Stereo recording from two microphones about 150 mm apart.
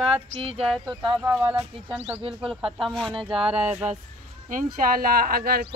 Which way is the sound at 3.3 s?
40° right (ahead or behind).